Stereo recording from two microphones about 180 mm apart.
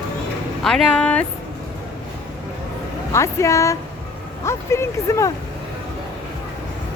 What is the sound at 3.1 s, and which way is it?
Speech, 15° left (ahead or behind).